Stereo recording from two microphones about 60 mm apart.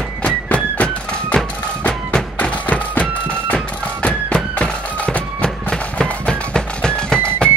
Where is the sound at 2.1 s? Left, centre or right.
Left.